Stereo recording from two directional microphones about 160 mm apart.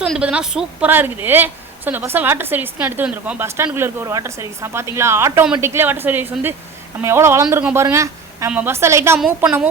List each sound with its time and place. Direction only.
0.0 s a woman's voice: 5° right (ahead or behind)
9.1 s a woman's voice: 5° right (ahead or behind)